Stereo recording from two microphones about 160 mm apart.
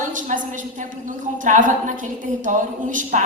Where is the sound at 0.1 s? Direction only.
55° right (ahead or behind).